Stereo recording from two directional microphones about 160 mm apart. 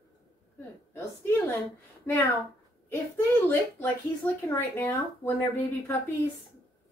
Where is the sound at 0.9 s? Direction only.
15° left (ahead or behind).